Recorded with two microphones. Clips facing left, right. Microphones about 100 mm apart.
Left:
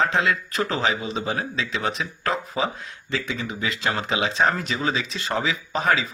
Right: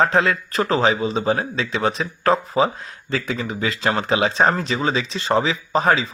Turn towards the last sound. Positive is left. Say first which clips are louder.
# right 4 dB
turn(degrees=-35)  # may be behind; listen again after turning